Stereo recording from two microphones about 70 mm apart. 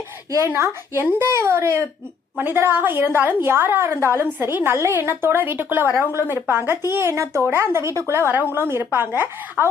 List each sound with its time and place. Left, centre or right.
0.4 s a woman's voice: right